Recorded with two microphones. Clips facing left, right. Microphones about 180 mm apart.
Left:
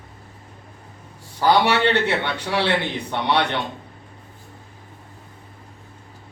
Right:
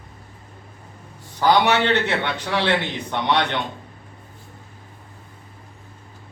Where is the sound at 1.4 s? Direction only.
10° left (ahead or behind).